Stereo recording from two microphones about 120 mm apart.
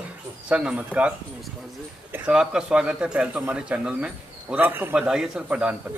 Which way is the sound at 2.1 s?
10° right (ahead or behind).